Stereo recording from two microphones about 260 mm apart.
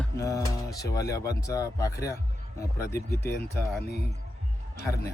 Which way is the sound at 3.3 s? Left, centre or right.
Left.